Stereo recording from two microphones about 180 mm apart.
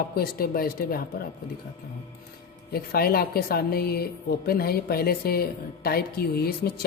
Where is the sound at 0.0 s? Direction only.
55° left (ahead or behind).